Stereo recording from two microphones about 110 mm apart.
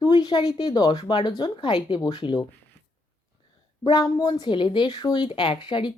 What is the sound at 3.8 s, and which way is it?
A woman's voice, 40° left (ahead or behind).